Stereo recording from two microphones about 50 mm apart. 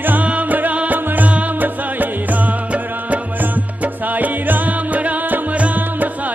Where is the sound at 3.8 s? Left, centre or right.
Right.